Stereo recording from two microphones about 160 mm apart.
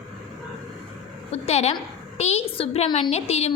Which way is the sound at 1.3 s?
40° left (ahead or behind).